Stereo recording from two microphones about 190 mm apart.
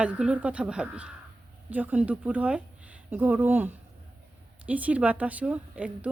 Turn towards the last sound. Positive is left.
turn(degrees=-5)  # may be behind; listen again after turning